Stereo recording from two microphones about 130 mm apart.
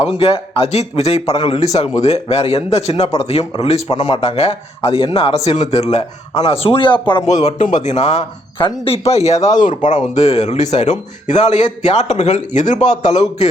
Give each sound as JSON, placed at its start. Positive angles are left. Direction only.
{"t": 0.0, "sound": "speech", "side_deg": 50}
{"t": 5.4, "sound": "speech", "side_deg": 60}
{"t": 7.4, "sound": "speech", "side_deg": 70}
{"t": 13.1, "sound": "speech", "side_deg": 55}